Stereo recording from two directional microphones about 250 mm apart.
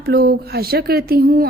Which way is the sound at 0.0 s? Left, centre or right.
Right.